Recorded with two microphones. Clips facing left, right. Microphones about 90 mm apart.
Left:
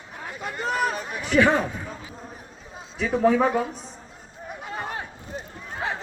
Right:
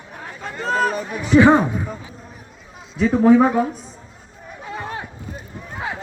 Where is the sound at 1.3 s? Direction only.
20° right (ahead or behind).